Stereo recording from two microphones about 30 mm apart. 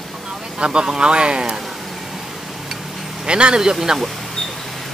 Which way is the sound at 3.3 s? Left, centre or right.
Right.